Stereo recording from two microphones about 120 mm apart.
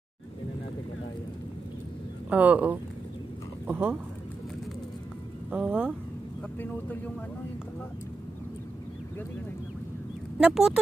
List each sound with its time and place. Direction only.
2.2 s speech: 15° right (ahead or behind)
5.5 s speech: 10° right (ahead or behind)
10.4 s speech: 5° right (ahead or behind)